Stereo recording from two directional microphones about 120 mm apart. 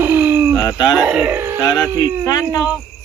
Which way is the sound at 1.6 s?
20° left (ahead or behind).